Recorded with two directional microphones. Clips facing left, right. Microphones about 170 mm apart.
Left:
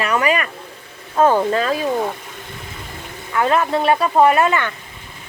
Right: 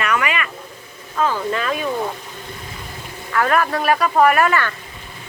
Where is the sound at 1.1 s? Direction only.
50° left (ahead or behind).